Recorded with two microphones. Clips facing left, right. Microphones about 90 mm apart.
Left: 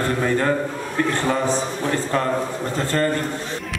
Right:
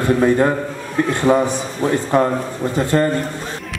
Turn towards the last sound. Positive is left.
turn(degrees=-15)  # may be behind; listen again after turning